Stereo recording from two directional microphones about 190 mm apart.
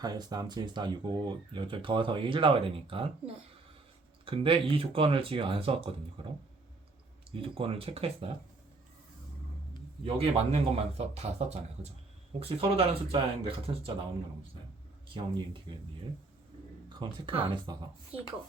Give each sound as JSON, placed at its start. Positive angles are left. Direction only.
{"t": 0.0, "sound": "speech", "side_deg": -20}
{"t": 10.0, "sound": "speech", "side_deg": -30}
{"t": 15.7, "sound": "speech", "side_deg": -25}
{"t": 16.9, "sound": "speech", "side_deg": -25}